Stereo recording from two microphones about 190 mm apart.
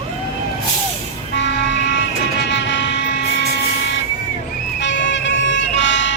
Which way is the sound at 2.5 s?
70° left (ahead or behind).